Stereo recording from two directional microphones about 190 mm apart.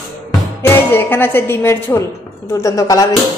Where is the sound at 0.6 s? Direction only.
10° left (ahead or behind).